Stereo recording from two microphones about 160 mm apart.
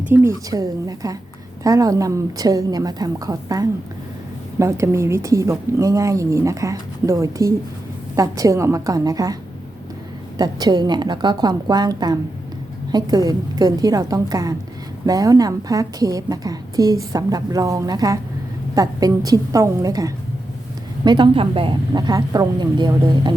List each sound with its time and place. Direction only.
0.0 s a woman's voice: 15° right (ahead or behind)